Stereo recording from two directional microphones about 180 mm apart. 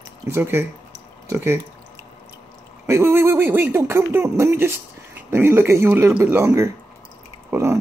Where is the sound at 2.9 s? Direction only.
15° right (ahead or behind).